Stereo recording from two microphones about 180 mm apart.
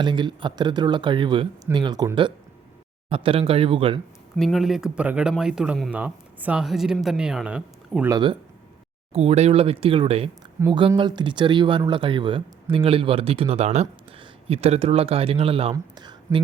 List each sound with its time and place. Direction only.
0.0 s speech: 25° right (ahead or behind)
4.4 s speech: centre (ahead or behind)
8.1 s speech: 25° right (ahead or behind)